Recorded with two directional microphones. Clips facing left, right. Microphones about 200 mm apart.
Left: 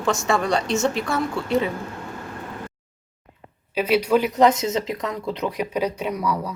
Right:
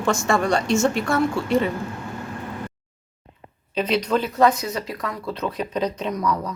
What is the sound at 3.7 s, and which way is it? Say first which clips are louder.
Speech: left 3 dB; 10° left (ahead or behind).